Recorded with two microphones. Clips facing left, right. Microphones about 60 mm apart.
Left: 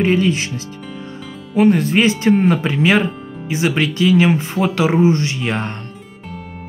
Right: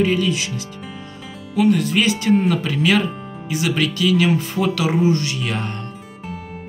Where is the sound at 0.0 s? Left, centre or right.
Left.